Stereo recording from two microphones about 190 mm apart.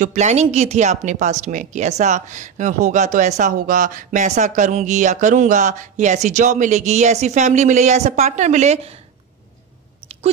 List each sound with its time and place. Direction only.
0.0 s speech: 40° right (ahead or behind)